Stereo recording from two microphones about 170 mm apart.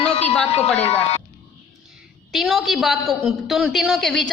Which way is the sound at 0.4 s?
35° left (ahead or behind).